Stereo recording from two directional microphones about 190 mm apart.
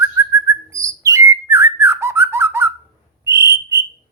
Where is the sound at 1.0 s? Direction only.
15° right (ahead or behind).